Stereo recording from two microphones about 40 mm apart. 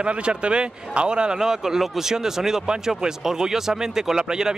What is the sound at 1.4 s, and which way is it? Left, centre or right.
Speech, centre.